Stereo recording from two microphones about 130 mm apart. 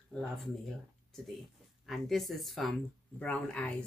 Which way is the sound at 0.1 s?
10° left (ahead or behind).